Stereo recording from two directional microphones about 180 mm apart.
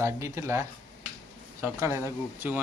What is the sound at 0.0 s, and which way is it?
Speech, 15° right (ahead or behind).